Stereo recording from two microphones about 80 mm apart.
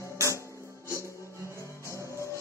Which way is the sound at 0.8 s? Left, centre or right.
Left.